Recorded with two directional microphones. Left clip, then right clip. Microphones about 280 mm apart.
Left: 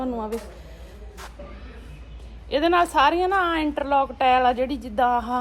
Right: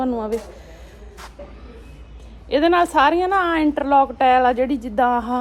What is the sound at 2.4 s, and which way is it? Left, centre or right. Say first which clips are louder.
A woman's voice: right 3 dB; right.